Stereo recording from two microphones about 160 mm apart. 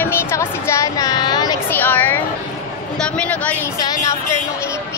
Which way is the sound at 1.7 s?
10° left (ahead or behind).